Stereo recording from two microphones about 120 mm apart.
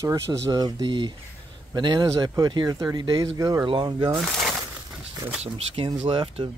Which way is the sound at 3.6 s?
45° right (ahead or behind).